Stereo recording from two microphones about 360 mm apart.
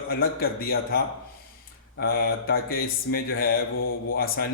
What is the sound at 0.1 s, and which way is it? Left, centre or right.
Speech, left.